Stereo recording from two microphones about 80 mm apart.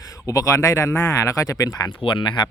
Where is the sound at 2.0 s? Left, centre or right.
Left.